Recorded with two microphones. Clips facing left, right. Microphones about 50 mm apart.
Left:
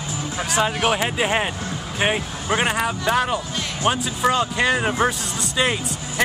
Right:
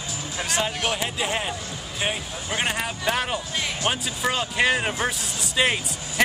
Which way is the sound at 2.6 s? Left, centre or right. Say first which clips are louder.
Left 4 dB; centre.